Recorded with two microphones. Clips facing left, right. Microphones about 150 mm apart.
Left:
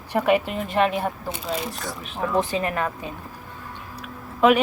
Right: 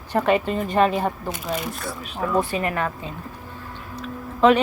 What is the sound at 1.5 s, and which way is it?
Speech, 25° left (ahead or behind).